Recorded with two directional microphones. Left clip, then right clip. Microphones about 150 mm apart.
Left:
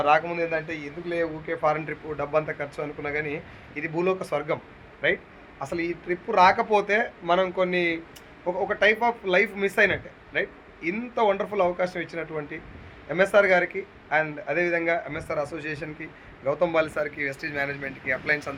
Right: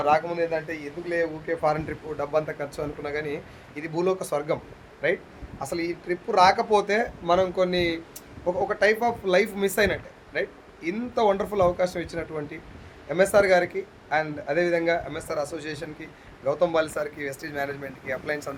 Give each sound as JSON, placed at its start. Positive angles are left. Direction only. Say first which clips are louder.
{"t": 0.0, "sound": "a man's voice", "louder": "left 1 dB", "side_deg": -15}